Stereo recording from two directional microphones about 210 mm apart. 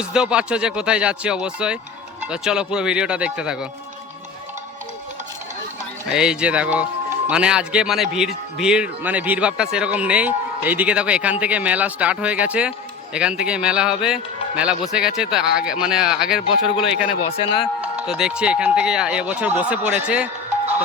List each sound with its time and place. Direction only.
0.0 s a man's voice: 5° right (ahead or behind)
6.1 s a man's voice: 5° right (ahead or behind)
17.4 s speech: 25° left (ahead or behind)
17.7 s a man's voice: 5° right (ahead or behind)